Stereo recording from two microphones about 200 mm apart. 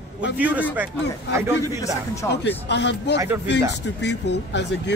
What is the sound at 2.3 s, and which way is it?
Speech, 60° left (ahead or behind).